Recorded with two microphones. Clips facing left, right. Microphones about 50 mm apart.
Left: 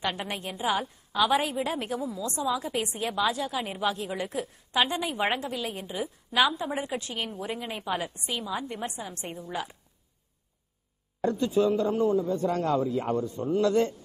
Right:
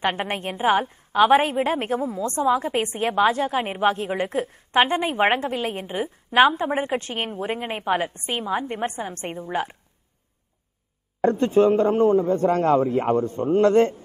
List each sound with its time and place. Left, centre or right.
0.0 s a woman's voice: right
11.1 s a woman's voice: right